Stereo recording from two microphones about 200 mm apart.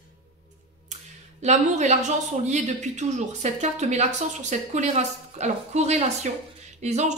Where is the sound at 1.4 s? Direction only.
35° right (ahead or behind).